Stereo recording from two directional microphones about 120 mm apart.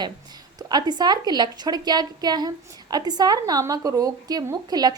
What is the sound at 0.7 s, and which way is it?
A woman's voice, 35° right (ahead or behind).